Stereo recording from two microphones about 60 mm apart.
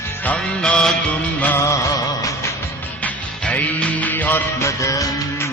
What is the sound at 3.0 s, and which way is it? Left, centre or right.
Music, left.